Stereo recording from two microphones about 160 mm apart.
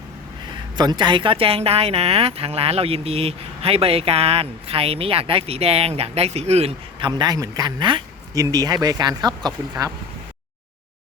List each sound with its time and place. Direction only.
0.8 s a man's voice: 25° right (ahead or behind)